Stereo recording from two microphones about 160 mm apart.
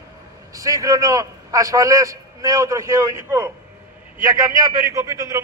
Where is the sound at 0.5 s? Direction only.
20° right (ahead or behind).